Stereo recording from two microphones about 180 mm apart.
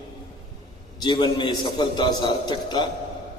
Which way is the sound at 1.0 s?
25° left (ahead or behind).